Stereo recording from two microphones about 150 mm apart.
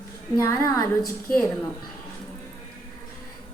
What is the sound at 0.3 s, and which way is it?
Speech, 20° left (ahead or behind).